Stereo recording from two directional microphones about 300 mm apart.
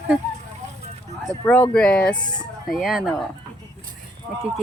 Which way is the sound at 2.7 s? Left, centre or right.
Centre.